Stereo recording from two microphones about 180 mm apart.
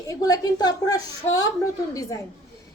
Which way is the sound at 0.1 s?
20° left (ahead or behind).